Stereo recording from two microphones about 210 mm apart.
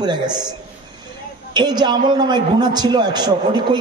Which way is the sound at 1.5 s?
20° right (ahead or behind).